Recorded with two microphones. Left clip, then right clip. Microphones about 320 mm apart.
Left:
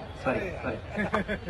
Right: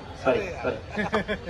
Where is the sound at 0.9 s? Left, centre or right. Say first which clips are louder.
Even; right.